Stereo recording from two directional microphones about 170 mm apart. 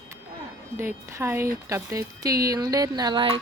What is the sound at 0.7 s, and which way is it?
Speech, 15° right (ahead or behind).